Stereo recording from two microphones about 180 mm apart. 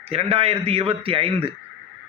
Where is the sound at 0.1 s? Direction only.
35° right (ahead or behind).